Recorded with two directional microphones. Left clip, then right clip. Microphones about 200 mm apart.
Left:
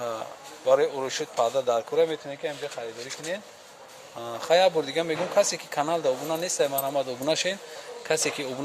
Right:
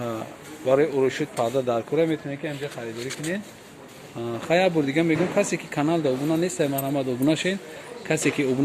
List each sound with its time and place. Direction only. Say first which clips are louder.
0.0 s speech: right 1 dB; 5° left (ahead or behind)
4.2 s speech: left 1 dB; 15° left (ahead or behind)